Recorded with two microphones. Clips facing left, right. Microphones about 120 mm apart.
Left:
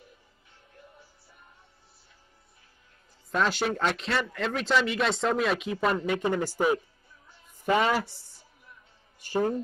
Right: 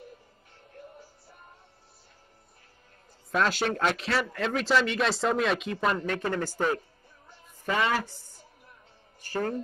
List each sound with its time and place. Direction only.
3.3 s speech: centre (ahead or behind); by 6.5 s 15° left (ahead or behind)
7.6 s a woman's voice: 15° left (ahead or behind)
8.0 s a woman's voice: 15° right (ahead or behind)
9.2 s speech: 15° left (ahead or behind)